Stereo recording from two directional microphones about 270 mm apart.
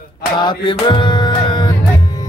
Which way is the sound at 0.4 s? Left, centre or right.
Centre.